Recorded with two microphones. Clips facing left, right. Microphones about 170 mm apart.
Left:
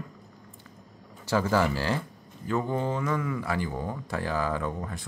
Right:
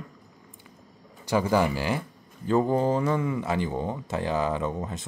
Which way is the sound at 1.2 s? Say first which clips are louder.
Right 2 dB; 15° right (ahead or behind).